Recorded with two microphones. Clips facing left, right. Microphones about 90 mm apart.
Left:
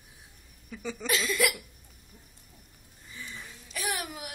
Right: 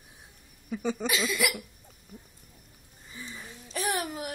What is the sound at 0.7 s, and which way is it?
Speech, 35° right (ahead or behind).